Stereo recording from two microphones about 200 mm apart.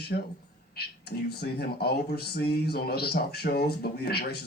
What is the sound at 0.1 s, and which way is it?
A man's voice, 50° left (ahead or behind).